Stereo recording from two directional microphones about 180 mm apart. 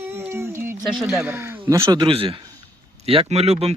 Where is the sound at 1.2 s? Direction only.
15° right (ahead or behind).